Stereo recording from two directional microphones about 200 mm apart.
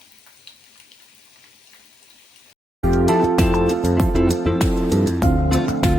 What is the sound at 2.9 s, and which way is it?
Music, centre (ahead or behind).